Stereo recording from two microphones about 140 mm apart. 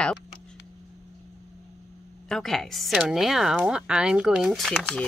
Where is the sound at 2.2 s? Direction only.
Centre (ahead or behind).